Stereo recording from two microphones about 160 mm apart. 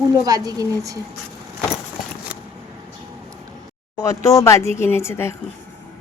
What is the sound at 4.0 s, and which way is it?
A woman's voice, 20° left (ahead or behind).